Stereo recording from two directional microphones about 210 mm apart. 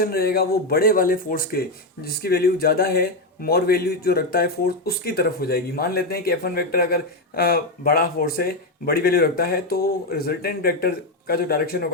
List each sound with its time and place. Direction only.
0.0 s speech: 45° left (ahead or behind)